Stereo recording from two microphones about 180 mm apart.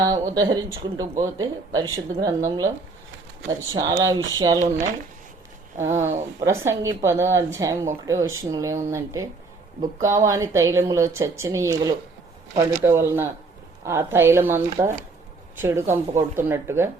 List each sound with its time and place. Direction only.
0.0 s speech: 20° right (ahead or behind)
5.8 s a woman's voice: 15° right (ahead or behind)